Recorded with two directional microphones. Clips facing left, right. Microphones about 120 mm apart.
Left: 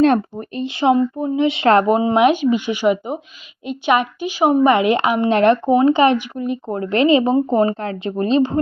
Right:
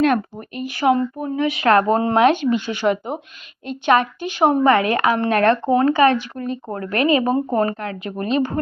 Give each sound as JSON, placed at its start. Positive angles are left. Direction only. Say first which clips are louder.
{"t": 0.0, "sound": "a woman's voice", "louder": "left 3 dB", "side_deg": 30}
{"t": 1.9, "sound": "a woman's voice", "louder": "left 1 dB", "side_deg": 10}